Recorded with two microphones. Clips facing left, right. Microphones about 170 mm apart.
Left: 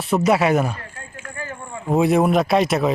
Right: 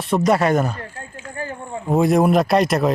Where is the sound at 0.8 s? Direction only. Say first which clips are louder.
Right 4 dB; 35° right (ahead or behind).